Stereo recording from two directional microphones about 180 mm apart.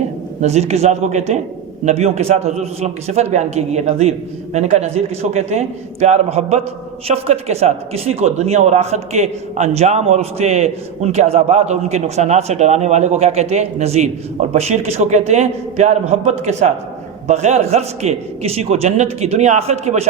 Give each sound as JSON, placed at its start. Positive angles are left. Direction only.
{"t": 0.4, "sound": "a man's voice", "side_deg": -35}